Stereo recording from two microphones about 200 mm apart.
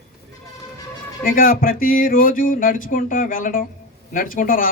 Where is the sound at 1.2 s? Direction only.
45° left (ahead or behind).